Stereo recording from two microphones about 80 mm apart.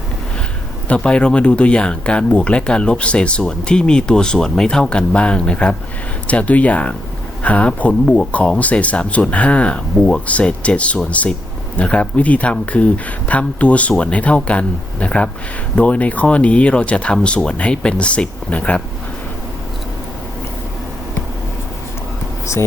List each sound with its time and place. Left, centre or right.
0.9 s speech: centre